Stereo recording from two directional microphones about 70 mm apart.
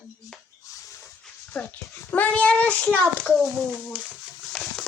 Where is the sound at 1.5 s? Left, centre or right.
Left.